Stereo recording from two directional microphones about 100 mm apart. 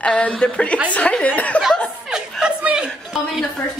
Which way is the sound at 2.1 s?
10° right (ahead or behind).